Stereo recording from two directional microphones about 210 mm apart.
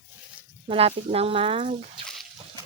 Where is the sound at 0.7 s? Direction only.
30° right (ahead or behind).